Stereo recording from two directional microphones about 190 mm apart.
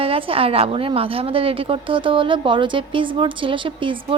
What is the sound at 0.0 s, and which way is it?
A woman's voice, 30° right (ahead or behind).